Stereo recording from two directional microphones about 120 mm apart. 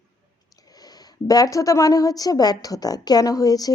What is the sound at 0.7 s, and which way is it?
A woman's voice, 35° left (ahead or behind).